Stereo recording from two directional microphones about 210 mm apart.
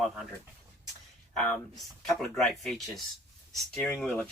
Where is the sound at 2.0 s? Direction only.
Centre (ahead or behind).